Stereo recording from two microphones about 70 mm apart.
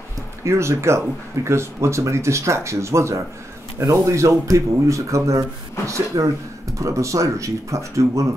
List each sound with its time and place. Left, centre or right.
0.4 s speech: right